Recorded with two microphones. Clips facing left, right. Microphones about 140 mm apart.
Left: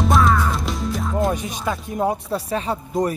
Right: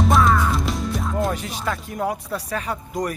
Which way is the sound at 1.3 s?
20° left (ahead or behind).